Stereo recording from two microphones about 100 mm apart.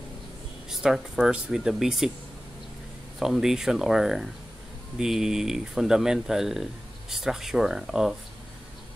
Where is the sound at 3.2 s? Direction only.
5° right (ahead or behind).